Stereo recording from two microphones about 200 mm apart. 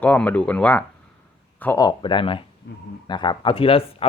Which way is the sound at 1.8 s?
20° left (ahead or behind).